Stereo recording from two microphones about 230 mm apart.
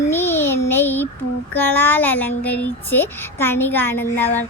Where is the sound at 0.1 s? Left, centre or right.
Centre.